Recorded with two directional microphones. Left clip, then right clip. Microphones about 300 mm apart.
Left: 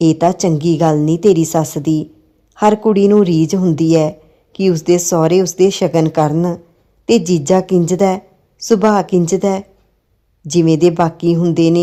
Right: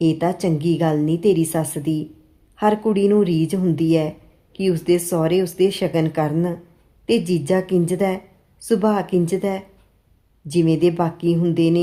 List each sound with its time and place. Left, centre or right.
0.0 s a woman's voice: left